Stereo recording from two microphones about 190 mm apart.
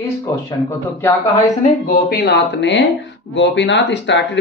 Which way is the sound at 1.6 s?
50° left (ahead or behind).